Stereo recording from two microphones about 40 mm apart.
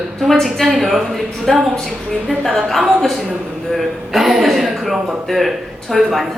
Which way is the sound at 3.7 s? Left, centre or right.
Centre.